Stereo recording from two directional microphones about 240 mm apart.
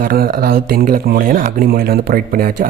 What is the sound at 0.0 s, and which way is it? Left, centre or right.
Speech, right.